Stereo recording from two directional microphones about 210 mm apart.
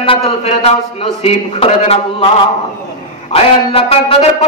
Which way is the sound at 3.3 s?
30° left (ahead or behind).